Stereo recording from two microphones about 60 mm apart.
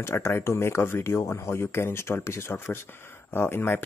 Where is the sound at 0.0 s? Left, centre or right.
Left.